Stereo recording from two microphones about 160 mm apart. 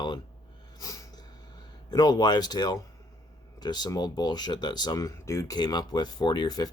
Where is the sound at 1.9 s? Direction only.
25° left (ahead or behind).